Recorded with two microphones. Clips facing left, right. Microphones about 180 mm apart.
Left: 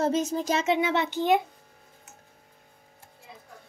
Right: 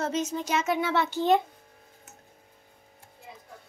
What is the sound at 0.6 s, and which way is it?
Speech, 20° left (ahead or behind).